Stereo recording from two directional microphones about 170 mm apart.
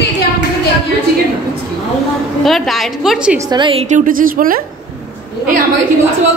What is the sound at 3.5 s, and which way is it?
Speech, 30° right (ahead or behind).